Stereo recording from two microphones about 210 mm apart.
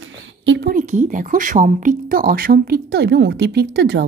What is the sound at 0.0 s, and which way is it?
A woman's voice, 65° right (ahead or behind).